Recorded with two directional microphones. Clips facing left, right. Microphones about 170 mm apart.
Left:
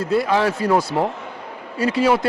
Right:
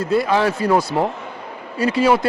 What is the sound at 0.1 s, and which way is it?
Speech, 10° right (ahead or behind).